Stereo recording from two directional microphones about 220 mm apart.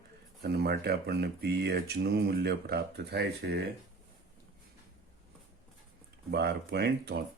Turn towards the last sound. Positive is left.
turn(degrees=-45)  # may be behind; listen again after turning